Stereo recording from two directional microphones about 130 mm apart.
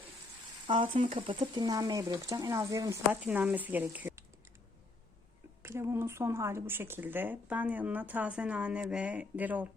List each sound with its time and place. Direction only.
0.7 s speech: 40° right (ahead or behind)
1.4 s speech: 30° right (ahead or behind)
3.1 s speech: 15° right (ahead or behind)
5.6 s speech: 20° right (ahead or behind)